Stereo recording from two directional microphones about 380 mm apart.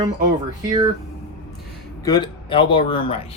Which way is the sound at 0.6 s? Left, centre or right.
Centre.